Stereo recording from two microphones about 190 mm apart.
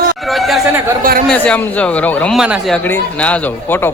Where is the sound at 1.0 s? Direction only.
45° right (ahead or behind).